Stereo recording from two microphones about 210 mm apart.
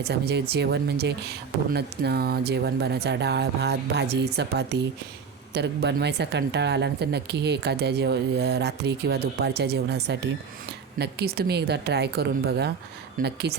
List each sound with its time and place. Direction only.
0.0 s a woman's voice: 50° right (ahead or behind)